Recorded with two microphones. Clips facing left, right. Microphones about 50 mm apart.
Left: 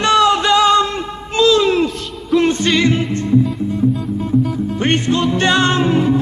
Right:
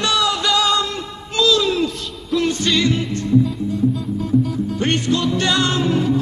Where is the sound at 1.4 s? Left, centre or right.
Left.